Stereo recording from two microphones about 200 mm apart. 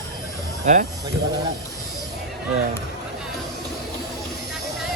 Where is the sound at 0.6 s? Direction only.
35° right (ahead or behind).